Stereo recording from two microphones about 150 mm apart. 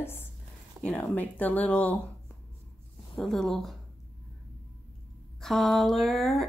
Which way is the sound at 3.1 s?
Centre (ahead or behind).